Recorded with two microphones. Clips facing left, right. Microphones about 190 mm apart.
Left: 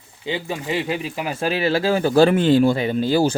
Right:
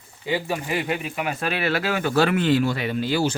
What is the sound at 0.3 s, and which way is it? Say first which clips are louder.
Speech: even; 20° left (ahead or behind).